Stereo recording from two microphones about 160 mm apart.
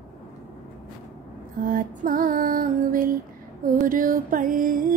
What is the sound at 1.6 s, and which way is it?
Music, 60° right (ahead or behind).